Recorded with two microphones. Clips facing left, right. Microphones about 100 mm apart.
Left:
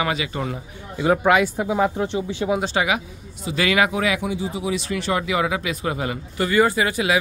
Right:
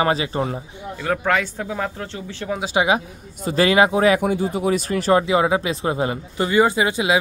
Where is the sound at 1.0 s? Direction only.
10° left (ahead or behind).